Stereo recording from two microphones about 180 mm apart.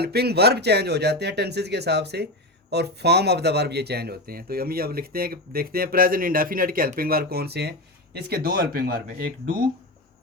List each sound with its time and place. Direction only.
0.0 s speech: 65° right (ahead or behind)